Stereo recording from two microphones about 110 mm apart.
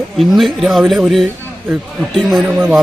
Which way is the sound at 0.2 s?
Centre (ahead or behind).